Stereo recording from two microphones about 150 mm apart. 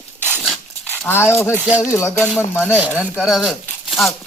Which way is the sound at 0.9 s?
15° left (ahead or behind).